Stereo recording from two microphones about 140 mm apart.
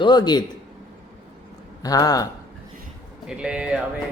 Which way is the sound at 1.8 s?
25° left (ahead or behind).